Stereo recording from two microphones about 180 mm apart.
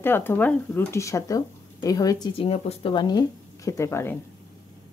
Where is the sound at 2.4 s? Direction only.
30° left (ahead or behind); by 4.1 s 15° left (ahead or behind).